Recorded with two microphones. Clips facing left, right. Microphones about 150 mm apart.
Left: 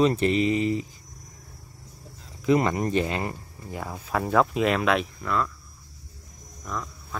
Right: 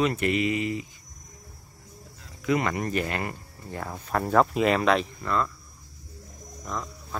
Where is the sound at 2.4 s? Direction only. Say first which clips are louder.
Left 4 dB; 30° left (ahead or behind).